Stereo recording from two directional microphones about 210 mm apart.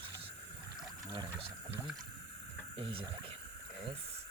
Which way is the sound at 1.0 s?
20° right (ahead or behind).